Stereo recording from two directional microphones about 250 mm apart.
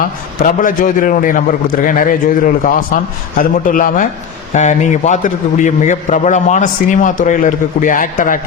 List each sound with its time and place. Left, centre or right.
0.4 s a man's voice: left